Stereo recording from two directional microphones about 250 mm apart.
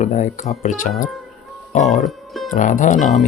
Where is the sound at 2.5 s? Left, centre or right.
Left.